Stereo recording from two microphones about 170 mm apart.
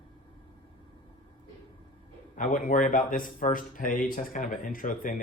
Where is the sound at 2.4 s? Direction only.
50° left (ahead or behind).